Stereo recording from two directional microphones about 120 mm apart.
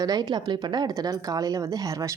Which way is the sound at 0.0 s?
35° right (ahead or behind).